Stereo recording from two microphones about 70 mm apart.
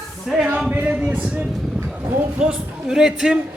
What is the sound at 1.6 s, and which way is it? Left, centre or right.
Vehicle, centre.